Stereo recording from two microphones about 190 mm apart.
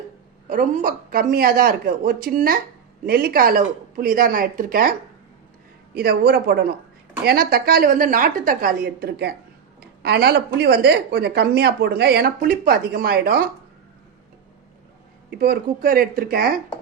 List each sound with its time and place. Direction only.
0.4 s a woman's voice: 45° right (ahead or behind)
15.3 s speech: 55° right (ahead or behind)